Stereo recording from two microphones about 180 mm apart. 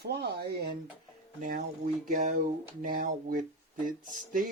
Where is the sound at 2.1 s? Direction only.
50° right (ahead or behind).